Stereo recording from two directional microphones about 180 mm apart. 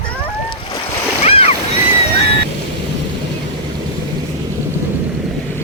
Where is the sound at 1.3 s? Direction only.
30° left (ahead or behind).